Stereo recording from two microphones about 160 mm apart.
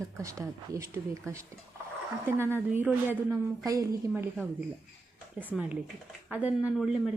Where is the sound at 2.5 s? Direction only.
10° right (ahead or behind).